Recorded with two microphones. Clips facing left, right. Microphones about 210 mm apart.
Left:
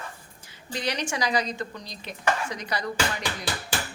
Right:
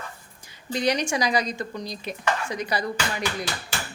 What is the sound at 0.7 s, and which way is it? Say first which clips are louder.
Speech: right 6 dB; 15° right (ahead or behind).